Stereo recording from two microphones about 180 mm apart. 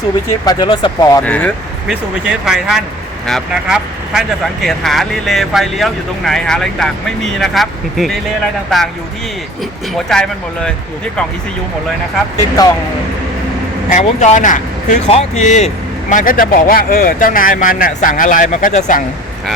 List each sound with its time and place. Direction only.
0.4 s speech: 25° left (ahead or behind)
1.2 s speech: 10° left (ahead or behind)
2.4 s speech: 5° right (ahead or behind)
9.9 s speech: 5° left (ahead or behind)
12.6 s speech: 20° left (ahead or behind)
13.9 s speech: 45° left (ahead or behind)